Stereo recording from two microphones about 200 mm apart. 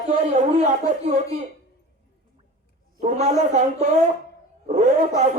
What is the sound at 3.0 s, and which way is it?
A man's voice, 35° right (ahead or behind).